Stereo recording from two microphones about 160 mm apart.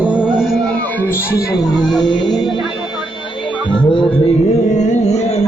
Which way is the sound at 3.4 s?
30° left (ahead or behind).